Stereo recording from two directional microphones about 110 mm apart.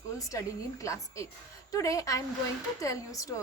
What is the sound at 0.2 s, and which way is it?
A woman's voice, 30° left (ahead or behind).